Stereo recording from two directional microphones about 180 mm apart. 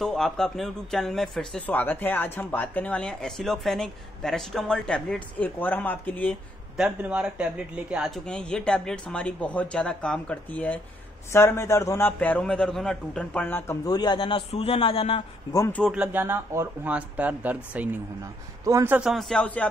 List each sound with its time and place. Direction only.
0.0 s speech: centre (ahead or behind)
6.8 s a man's voice: 5° right (ahead or behind); by 13.7 s 10° left (ahead or behind)
13.8 s a man's voice: 25° left (ahead or behind)
15.5 s a man's voice: 15° left (ahead or behind)
15.8 s a man's voice: 5° right (ahead or behind)
18.9 s speech: centre (ahead or behind)